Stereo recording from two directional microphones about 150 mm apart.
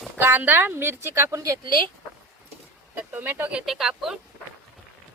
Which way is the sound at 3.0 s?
10° right (ahead or behind).